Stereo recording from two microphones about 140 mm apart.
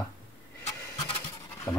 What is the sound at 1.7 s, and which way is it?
Dog, 10° left (ahead or behind).